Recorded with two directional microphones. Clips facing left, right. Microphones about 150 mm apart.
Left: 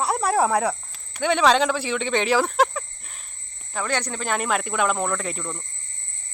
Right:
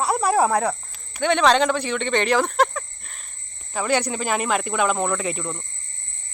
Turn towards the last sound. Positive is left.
turn(degrees=-10)  # may be behind; listen again after turning